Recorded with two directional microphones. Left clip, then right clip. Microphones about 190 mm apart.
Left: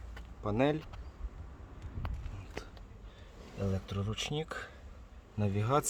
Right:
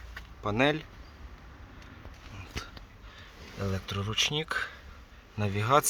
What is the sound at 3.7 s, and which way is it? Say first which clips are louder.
Speech: right 8 dB; 10° left (ahead or behind).